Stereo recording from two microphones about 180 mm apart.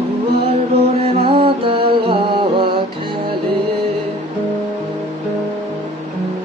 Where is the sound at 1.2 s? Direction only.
30° right (ahead or behind).